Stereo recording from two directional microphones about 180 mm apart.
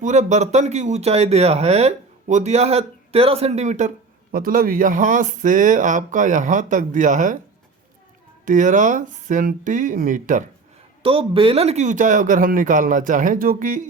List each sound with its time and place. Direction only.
0.0 s speech: 40° right (ahead or behind)
8.4 s speech: 45° right (ahead or behind)
11.0 s speech: 30° right (ahead or behind)